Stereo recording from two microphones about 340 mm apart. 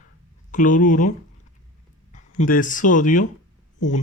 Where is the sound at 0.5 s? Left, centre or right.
Left.